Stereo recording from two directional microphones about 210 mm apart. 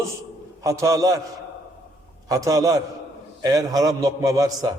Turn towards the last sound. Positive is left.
turn(degrees=-15)  # may be behind; listen again after turning